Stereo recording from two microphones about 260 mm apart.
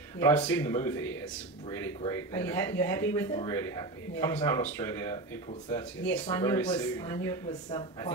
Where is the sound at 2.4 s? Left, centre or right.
Centre.